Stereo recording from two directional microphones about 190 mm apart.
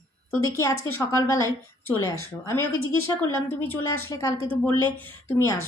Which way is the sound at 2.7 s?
90° left.